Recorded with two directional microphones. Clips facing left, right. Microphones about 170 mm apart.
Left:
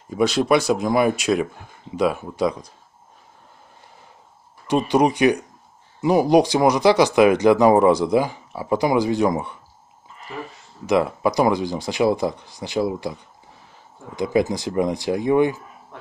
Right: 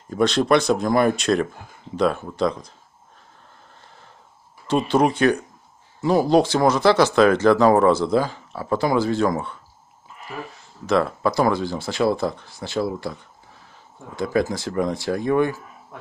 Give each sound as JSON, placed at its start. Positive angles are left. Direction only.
{"t": 0.1, "sound": "speech", "side_deg": 5}
{"t": 4.6, "sound": "speech", "side_deg": 15}
{"t": 10.9, "sound": "speech", "side_deg": 15}